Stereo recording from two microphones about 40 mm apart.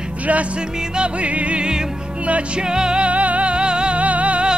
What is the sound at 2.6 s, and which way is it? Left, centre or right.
Music, centre.